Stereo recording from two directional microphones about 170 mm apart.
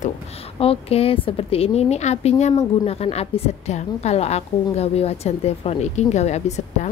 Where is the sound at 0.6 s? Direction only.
35° left (ahead or behind).